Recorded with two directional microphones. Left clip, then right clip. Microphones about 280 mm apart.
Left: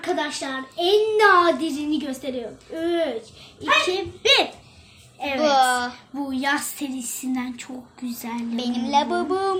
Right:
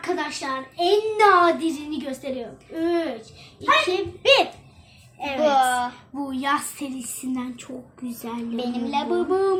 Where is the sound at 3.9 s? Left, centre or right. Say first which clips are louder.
Right 1 dB; centre.